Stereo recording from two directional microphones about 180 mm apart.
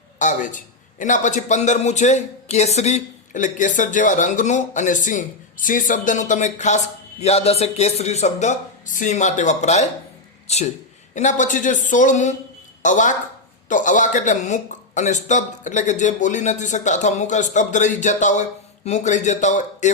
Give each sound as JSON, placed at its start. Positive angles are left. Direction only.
{"t": 0.2, "sound": "a man's voice", "side_deg": 45}